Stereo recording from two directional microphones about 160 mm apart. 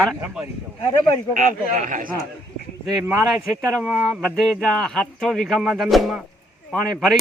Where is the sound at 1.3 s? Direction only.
55° right (ahead or behind).